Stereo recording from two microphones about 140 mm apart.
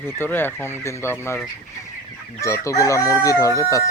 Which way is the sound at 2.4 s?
20° left (ahead or behind).